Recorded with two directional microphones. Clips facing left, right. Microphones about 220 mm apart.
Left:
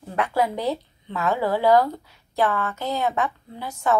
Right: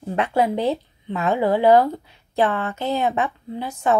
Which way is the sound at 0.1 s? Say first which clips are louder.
Right 3 dB; 25° right (ahead or behind).